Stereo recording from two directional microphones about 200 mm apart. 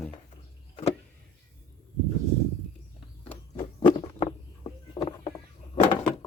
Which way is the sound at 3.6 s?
20° left (ahead or behind).